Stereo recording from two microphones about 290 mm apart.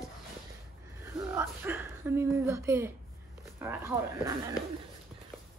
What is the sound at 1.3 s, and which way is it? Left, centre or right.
Speech, centre.